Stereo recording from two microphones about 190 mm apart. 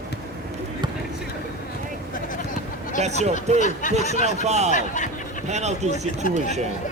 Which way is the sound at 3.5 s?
40° left (ahead or behind).